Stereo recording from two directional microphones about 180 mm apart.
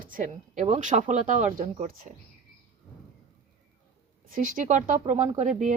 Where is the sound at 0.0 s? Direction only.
50° right (ahead or behind).